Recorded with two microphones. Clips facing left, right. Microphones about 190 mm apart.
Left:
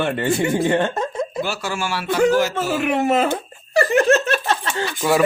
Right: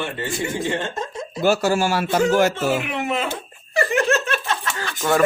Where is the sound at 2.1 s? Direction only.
50° right (ahead or behind).